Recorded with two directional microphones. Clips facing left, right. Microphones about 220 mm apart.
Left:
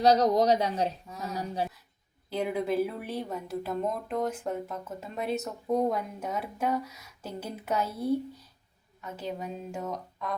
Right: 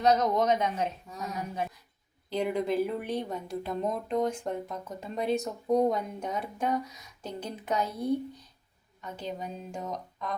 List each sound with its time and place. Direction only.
0.0 s speech: 35° left (ahead or behind)
2.3 s speech: 5° left (ahead or behind)